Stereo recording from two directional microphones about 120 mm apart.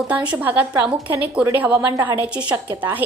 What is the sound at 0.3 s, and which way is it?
A woman's voice, 15° right (ahead or behind).